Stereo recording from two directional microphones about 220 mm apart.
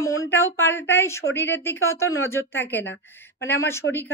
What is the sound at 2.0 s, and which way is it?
Speech, 70° left (ahead or behind).